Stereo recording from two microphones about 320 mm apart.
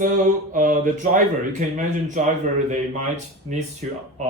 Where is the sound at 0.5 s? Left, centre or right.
Right.